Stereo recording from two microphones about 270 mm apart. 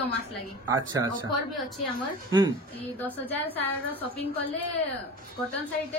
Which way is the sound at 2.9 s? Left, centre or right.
Centre.